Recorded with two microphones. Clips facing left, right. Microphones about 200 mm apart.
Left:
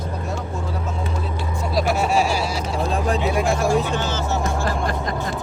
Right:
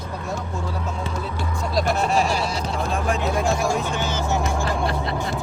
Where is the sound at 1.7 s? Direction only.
5° left (ahead or behind).